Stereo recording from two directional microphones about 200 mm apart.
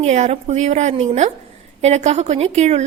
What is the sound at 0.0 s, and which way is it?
A woman's voice, 35° right (ahead or behind).